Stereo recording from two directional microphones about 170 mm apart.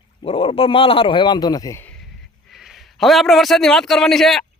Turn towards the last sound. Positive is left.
turn(degrees=0)  # may be behind; listen again after turning